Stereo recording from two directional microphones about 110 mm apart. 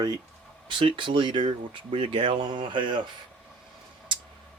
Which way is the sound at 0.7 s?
50° right (ahead or behind).